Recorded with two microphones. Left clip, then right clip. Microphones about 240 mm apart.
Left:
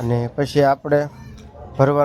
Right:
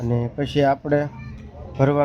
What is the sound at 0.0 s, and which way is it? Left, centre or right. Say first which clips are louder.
Speech: left 4 dB; centre.